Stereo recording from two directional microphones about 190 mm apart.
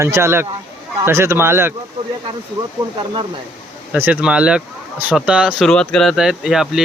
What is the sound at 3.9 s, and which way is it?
Speech, 5° right (ahead or behind).